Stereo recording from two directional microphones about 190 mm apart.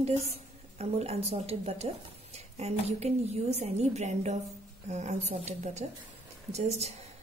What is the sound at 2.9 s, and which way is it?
Speech, 35° right (ahead or behind).